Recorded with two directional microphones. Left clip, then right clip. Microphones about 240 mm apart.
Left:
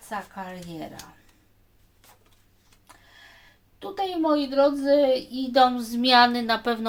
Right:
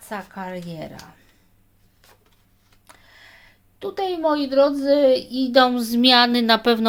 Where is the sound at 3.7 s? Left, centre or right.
Right.